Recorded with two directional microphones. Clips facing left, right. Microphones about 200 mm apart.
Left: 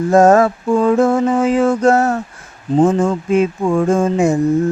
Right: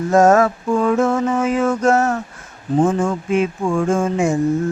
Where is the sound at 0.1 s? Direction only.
30° left (ahead or behind).